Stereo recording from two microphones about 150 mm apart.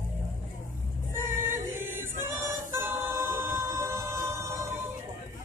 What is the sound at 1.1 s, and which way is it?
Choir, 15° right (ahead or behind).